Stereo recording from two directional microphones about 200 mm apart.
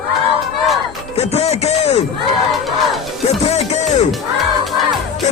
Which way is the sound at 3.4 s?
30° left (ahead or behind).